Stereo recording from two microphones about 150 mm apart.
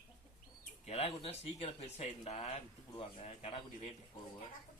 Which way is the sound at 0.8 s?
40° left (ahead or behind).